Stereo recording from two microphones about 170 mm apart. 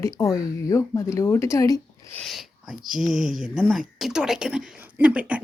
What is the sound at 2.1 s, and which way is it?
Speech, centre (ahead or behind).